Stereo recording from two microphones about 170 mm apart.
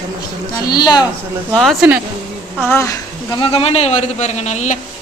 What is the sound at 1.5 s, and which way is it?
Speech, centre (ahead or behind).